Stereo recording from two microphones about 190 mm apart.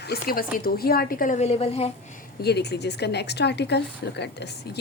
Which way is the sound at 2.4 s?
60° left (ahead or behind).